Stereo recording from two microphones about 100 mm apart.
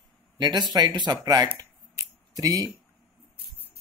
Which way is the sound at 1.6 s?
35° right (ahead or behind).